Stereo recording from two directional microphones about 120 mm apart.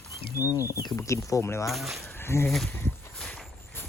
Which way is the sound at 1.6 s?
Centre (ahead or behind).